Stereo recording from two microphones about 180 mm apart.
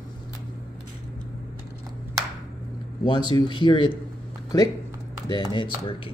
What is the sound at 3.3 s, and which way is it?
Speech, 25° left (ahead or behind).